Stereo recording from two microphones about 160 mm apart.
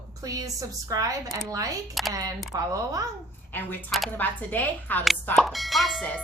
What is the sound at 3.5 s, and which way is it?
A woman's voice, 10° left (ahead or behind).